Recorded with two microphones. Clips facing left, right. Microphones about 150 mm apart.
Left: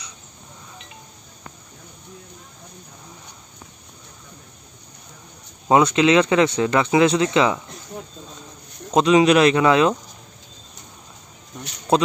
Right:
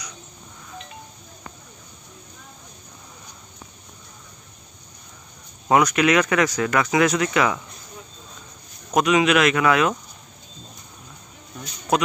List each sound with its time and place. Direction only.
5.7 s speech: 25° left (ahead or behind)
8.9 s speech: 30° left (ahead or behind)
11.9 s speech: 30° left (ahead or behind)